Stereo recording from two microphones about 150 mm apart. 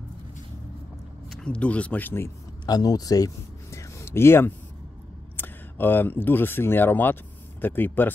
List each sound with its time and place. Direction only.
1.3 s speech: 5° left (ahead or behind)
2.6 s speech: 25° left (ahead or behind)